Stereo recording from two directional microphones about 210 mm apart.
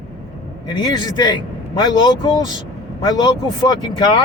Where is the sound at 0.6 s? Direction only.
20° left (ahead or behind).